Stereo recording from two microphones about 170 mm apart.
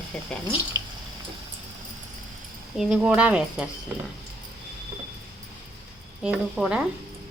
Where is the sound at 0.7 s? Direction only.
20° right (ahead or behind).